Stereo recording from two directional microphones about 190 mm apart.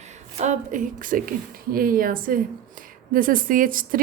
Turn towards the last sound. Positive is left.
turn(degrees=-45)  # may be behind; listen again after turning